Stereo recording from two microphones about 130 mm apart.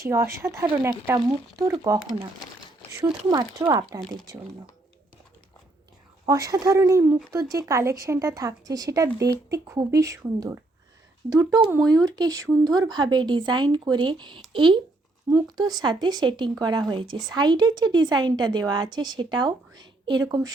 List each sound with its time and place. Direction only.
0.0 s speech: 20° right (ahead or behind)
3.2 s speech: 25° right (ahead or behind)
6.2 s a woman's voice: 25° right (ahead or behind)